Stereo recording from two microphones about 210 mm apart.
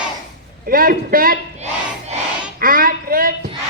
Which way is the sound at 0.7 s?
45° right (ahead or behind).